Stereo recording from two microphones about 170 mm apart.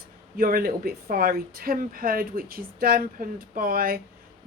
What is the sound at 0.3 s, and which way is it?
Speech, 60° right (ahead or behind).